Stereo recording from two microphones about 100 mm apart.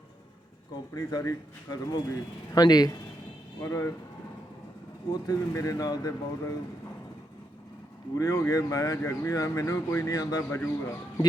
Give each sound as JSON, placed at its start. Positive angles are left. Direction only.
{"t": 0.9, "sound": "speech", "side_deg": 35}
{"t": 3.6, "sound": "speech", "side_deg": 30}
{"t": 5.1, "sound": "speech", "side_deg": 35}
{"t": 8.2, "sound": "speech", "side_deg": 35}
{"t": 10.5, "sound": "speech", "side_deg": 25}